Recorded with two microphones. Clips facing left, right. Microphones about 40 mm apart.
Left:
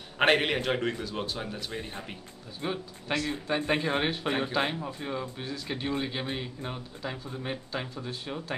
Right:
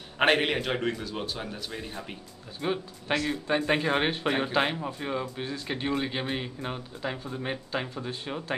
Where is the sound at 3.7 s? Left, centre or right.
Right.